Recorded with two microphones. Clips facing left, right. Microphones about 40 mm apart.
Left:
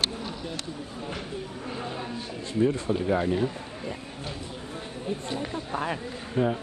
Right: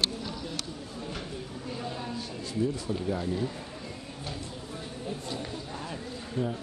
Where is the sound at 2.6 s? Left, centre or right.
Left.